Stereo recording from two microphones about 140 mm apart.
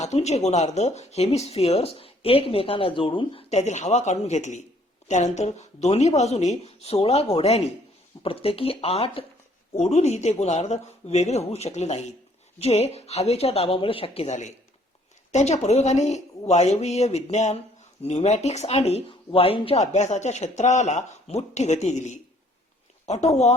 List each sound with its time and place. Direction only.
0.0 s speech: 50° left (ahead or behind)
3.5 s speech: 55° left (ahead or behind)